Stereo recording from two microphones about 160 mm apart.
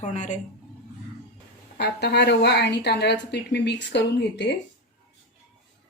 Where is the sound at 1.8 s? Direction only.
90° left.